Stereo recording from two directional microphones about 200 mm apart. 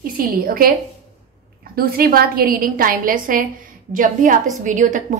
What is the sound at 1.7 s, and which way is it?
A woman's voice, 50° right (ahead or behind).